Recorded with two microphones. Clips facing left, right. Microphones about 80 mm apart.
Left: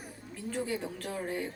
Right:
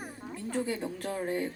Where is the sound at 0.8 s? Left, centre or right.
Right.